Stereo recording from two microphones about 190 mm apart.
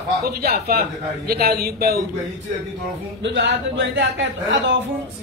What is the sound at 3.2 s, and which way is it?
A man's voice, 70° right (ahead or behind).